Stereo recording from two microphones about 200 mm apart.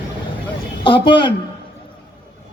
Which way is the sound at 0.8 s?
25° left (ahead or behind).